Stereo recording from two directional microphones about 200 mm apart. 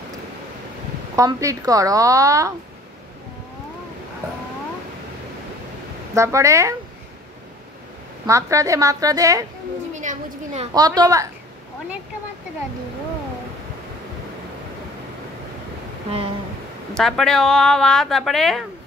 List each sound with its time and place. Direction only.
1.1 s a woman's voice: 15° right (ahead or behind)
6.1 s a woman's voice: 15° right (ahead or behind)
8.3 s a woman's voice: 15° right (ahead or behind)
9.9 s a child's voice: 35° right (ahead or behind)
10.7 s a woman's voice: 20° right (ahead or behind)
16.9 s speech: centre (ahead or behind)